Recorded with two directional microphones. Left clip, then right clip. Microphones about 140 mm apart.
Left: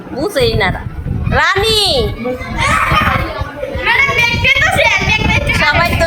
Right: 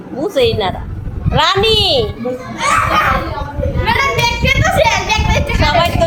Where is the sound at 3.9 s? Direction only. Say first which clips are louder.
Left 3 dB; 40° right (ahead or behind).